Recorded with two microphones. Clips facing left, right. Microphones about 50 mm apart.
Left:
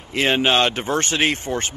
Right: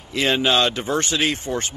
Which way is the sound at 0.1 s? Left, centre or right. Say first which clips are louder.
Left 1 dB; left.